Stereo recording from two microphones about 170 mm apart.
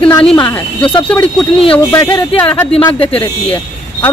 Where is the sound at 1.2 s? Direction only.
30° left (ahead or behind).